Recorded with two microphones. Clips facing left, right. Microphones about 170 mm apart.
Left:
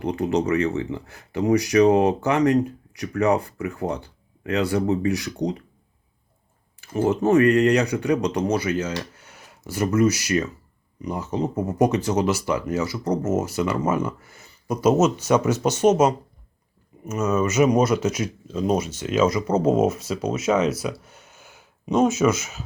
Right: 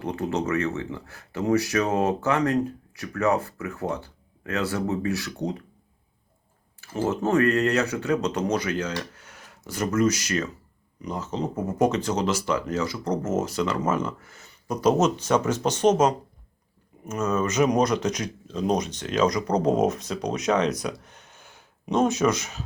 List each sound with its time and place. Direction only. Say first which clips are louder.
0.0 s speech: left 4 dB; 15° left (ahead or behind)
7.1 s speech: left 5 dB; 15° left (ahead or behind)